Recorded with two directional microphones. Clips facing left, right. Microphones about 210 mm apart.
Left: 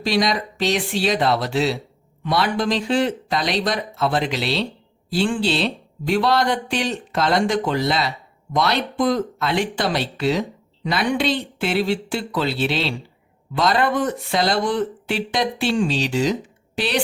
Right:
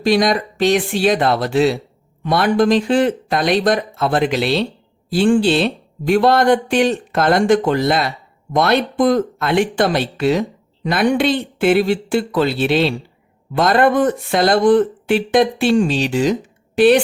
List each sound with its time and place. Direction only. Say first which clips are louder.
0.0 s a woman's voice: right 5 dB; 50° right (ahead or behind)